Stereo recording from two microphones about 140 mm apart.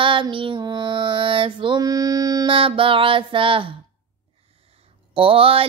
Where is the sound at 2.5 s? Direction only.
40° right (ahead or behind).